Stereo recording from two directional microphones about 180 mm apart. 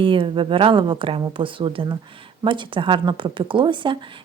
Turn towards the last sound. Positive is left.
turn(degrees=-25)  # may be behind; listen again after turning